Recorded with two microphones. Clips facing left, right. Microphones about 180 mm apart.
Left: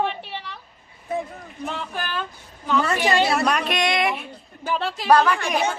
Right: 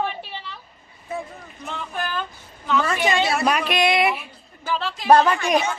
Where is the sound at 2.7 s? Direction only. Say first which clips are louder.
Left 1 dB; 35° left (ahead or behind).